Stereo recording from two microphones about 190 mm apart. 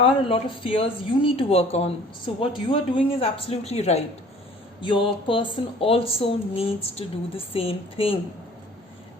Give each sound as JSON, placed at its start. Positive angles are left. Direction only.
{"t": 0.0, "sound": "speech", "side_deg": 30}